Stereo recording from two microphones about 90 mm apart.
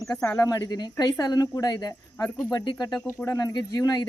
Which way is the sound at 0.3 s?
40° left (ahead or behind).